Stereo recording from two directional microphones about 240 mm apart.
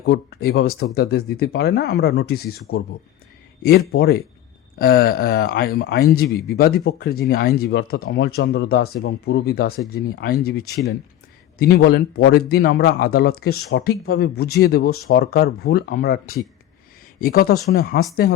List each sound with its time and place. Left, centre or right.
0.0 s speech: left
11.6 s speech: left